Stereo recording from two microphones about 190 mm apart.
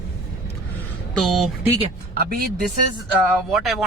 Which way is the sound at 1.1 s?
Centre (ahead or behind).